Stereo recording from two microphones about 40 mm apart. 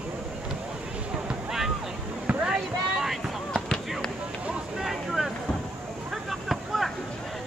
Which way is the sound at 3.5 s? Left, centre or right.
Right.